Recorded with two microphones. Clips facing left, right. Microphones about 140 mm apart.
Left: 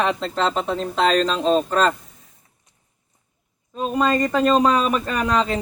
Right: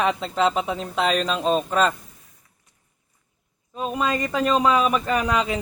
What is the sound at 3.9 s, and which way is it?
Speech, 5° right (ahead or behind).